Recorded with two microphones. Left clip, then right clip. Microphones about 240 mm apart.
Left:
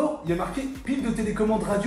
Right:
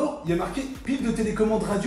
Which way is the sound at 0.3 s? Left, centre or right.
Centre.